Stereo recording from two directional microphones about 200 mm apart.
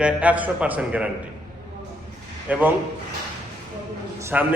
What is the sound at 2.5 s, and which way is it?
Speech, 5° right (ahead or behind).